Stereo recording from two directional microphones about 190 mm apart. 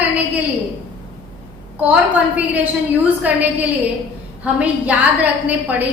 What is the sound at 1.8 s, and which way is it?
A woman's voice, 10° right (ahead or behind).